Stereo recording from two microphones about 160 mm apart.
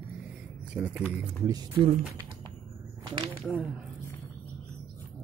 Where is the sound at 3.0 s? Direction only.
30° right (ahead or behind).